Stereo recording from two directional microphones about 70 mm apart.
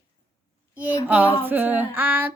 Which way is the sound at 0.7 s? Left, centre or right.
Right.